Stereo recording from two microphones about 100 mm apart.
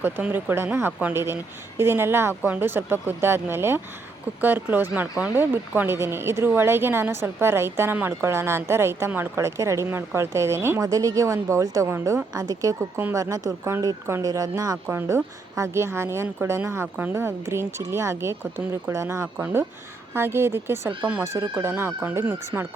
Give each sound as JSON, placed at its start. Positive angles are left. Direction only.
{"t": 0.0, "sound": "speech", "side_deg": -20}
{"t": 12.3, "sound": "speech", "side_deg": -40}
{"t": 12.8, "sound": "speech", "side_deg": -20}
{"t": 13.1, "sound": "speech", "side_deg": -35}
{"t": 14.8, "sound": "speech", "side_deg": -25}